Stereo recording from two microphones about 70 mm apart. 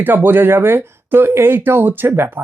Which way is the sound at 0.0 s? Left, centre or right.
Right.